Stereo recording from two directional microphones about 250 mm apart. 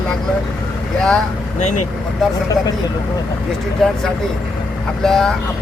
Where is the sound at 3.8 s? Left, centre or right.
Centre.